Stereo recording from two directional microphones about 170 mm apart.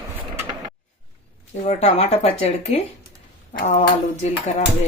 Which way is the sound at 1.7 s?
40° left (ahead or behind).